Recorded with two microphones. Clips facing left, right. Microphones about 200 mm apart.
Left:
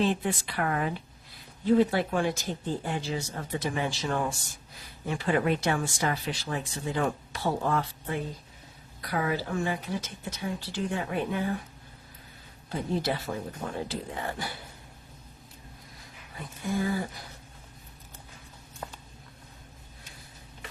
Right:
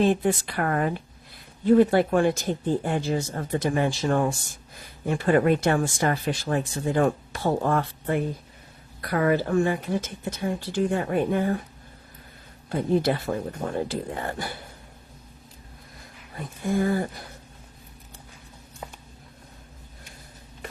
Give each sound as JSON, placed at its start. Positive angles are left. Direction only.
{"t": 0.0, "sound": "speech", "side_deg": -50}
{"t": 12.6, "sound": "speech", "side_deg": -55}
{"t": 16.6, "sound": "speech", "side_deg": -50}